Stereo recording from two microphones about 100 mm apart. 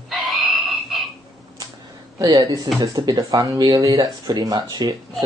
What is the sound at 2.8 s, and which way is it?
Speech, 35° right (ahead or behind).